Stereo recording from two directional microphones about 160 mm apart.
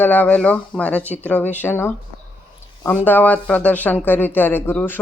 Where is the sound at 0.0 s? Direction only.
10° left (ahead or behind).